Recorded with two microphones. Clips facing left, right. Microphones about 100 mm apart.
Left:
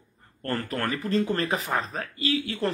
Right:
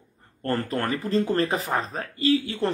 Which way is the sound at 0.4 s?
30° right (ahead or behind).